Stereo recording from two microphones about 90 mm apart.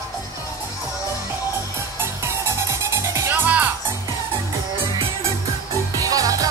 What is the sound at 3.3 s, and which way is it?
Music, 20° right (ahead or behind).